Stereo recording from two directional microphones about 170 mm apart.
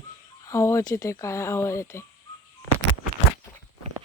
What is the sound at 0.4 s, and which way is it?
Speech, 15° left (ahead or behind).